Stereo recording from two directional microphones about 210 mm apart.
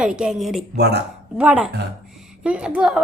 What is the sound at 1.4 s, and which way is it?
A woman's voice, 5° right (ahead or behind).